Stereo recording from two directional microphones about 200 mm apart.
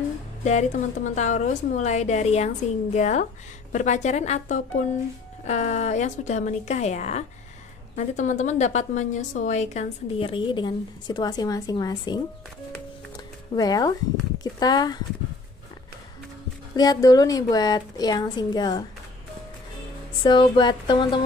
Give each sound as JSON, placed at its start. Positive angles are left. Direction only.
{"t": 0.4, "sound": "a woman's voice", "side_deg": 35}
{"t": 13.6, "sound": "a woman's voice", "side_deg": 20}
{"t": 16.7, "sound": "a woman's voice", "side_deg": 20}
{"t": 20.2, "sound": "a woman's voice", "side_deg": 25}